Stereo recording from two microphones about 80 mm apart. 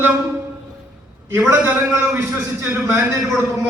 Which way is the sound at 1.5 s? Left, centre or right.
Right.